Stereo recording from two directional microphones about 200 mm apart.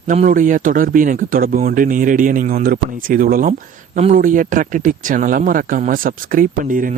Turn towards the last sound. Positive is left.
turn(degrees=-40)  # may be behind; listen again after turning